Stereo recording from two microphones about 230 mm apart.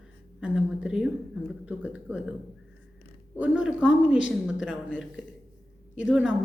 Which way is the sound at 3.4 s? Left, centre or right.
Centre.